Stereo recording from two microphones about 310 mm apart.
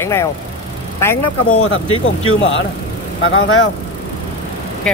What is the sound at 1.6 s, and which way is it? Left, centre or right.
Speech, left.